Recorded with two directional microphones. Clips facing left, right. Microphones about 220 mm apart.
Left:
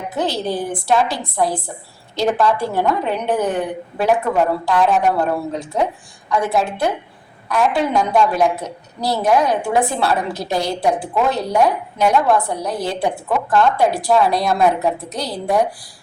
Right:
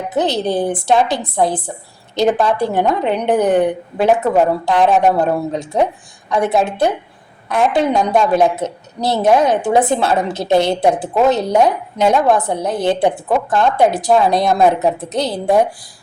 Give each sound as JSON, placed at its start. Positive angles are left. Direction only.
{"t": 0.1, "sound": "a woman's voice", "side_deg": -20}